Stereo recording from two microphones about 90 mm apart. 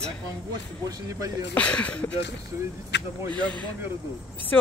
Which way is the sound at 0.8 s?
45° right (ahead or behind).